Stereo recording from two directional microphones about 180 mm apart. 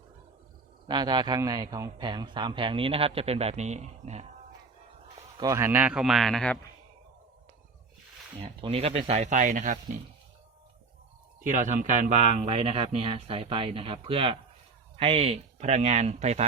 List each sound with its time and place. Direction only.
0.9 s a man's voice: 25° right (ahead or behind)
5.4 s a man's voice: 15° right (ahead or behind); by 6.6 s 5° left (ahead or behind)
8.4 s speech: 30° right (ahead or behind)
11.4 s speech: 45° right (ahead or behind)